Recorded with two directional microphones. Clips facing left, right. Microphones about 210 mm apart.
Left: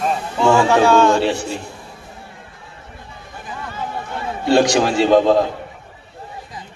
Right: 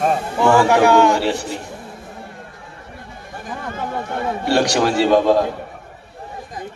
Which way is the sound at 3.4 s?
50° right (ahead or behind).